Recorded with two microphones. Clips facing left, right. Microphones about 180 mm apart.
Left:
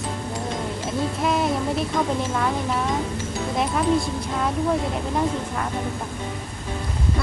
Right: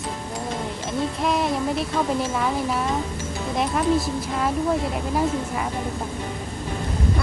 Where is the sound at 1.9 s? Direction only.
5° right (ahead or behind).